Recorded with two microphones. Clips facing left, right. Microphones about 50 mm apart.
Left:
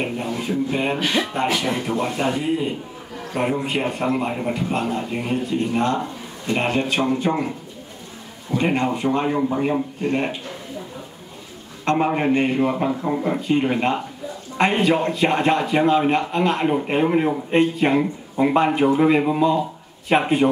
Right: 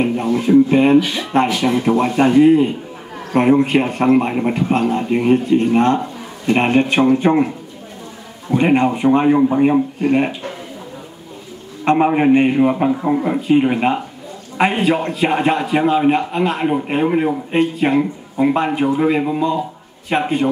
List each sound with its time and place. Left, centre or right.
0.0 s speech: right
1.3 s speech: right
2.1 s speech: right
4.3 s speech: right
11.8 s a man's voice: centre